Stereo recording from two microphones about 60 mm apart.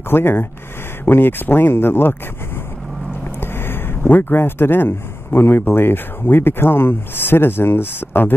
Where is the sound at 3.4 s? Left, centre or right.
Left.